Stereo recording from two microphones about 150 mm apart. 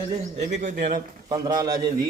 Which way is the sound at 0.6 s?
55° right (ahead or behind).